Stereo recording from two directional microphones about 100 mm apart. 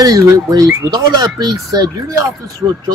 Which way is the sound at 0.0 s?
40° right (ahead or behind).